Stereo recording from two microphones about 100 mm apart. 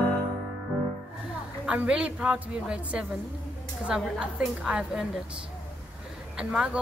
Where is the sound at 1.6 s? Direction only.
10° right (ahead or behind).